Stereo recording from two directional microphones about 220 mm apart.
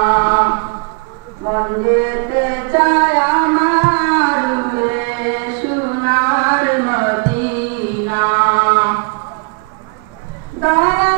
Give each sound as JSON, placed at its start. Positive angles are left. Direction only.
{"t": 0.0, "sound": "chant", "side_deg": -20}
{"t": 1.5, "sound": "music", "side_deg": -20}
{"t": 10.6, "sound": "a sound", "side_deg": -20}